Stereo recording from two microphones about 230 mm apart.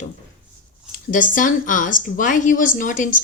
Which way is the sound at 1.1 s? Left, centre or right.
Left.